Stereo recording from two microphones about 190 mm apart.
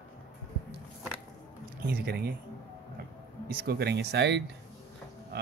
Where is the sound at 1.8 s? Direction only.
55° right (ahead or behind).